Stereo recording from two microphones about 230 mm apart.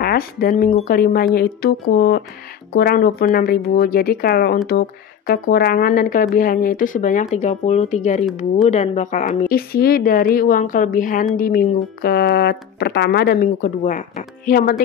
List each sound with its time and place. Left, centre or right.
0.0 s speech: left